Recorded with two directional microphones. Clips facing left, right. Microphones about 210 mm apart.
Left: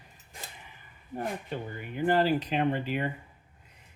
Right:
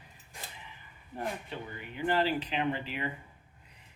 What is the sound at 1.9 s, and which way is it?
Speech, 45° left (ahead or behind).